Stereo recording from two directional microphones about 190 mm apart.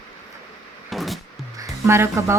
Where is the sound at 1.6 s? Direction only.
15° right (ahead or behind).